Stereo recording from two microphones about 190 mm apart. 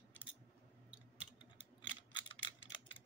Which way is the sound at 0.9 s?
5° right (ahead or behind).